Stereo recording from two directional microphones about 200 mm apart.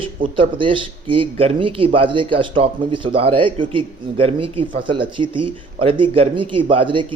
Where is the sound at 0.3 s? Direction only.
25° right (ahead or behind).